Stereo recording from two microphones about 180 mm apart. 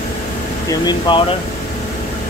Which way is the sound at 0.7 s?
25° left (ahead or behind).